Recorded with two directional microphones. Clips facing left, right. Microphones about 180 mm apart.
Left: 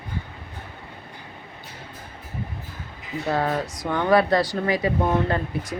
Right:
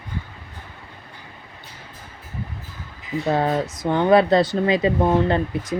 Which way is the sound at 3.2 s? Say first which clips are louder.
Right 3 dB; 25° right (ahead or behind).